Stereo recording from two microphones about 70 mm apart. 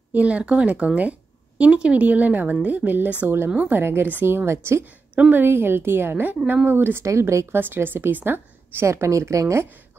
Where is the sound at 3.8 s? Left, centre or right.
Right.